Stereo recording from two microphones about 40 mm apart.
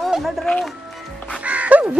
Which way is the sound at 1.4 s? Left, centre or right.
Right.